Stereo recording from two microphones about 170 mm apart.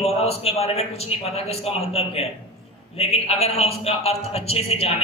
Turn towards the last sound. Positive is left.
turn(degrees=35)  # may be behind; listen again after turning